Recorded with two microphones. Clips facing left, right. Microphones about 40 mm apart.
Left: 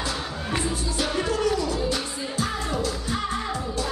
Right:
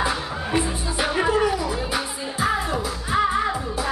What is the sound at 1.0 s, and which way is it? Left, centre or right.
Music, centre.